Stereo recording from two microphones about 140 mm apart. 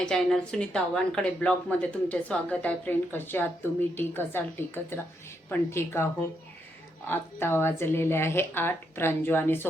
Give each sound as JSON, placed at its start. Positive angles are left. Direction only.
{"t": 0.0, "sound": "a woman's voice", "side_deg": 5}
{"t": 7.1, "sound": "a woman's voice", "side_deg": 15}